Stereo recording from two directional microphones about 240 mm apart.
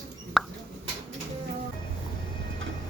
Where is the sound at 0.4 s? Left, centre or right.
Centre.